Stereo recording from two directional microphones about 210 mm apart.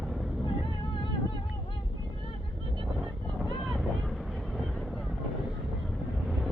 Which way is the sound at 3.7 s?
Centre (ahead or behind).